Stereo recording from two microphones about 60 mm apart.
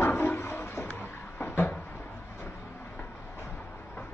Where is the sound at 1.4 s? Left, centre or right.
Left.